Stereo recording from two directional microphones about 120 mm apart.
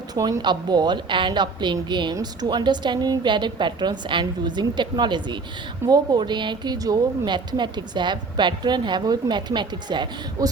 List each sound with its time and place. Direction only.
0.1 s a woman's voice: 30° right (ahead or behind)